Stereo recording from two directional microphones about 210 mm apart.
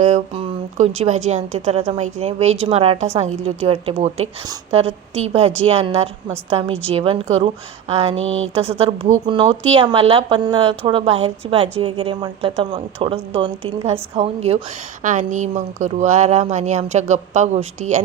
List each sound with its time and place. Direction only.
0.0 s a woman's voice: 35° right (ahead or behind)